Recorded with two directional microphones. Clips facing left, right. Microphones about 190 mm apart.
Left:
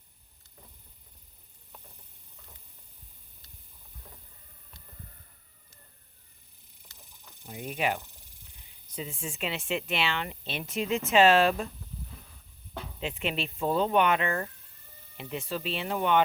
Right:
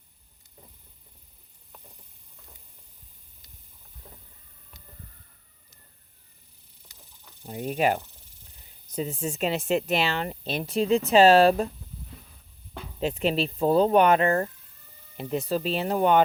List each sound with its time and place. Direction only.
7.4 s speech: 35° right (ahead or behind)
13.0 s speech: 40° right (ahead or behind)